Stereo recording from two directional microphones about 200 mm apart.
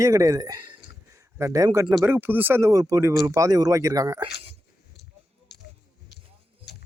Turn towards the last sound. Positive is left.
turn(degrees=55)  # may be behind; listen again after turning